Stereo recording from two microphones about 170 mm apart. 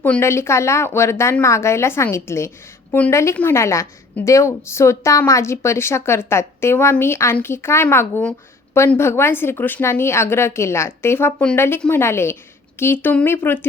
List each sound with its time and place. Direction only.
0.0 s a woman's voice: 15° left (ahead or behind)